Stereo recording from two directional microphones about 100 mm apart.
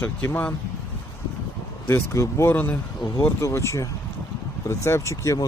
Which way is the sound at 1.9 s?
25° left (ahead or behind).